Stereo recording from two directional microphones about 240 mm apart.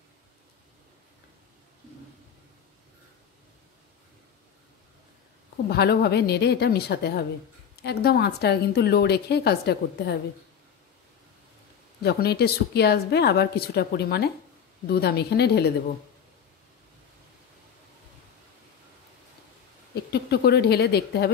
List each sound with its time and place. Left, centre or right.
5.7 s a woman's voice: left
12.0 s a woman's voice: left
20.1 s a woman's voice: left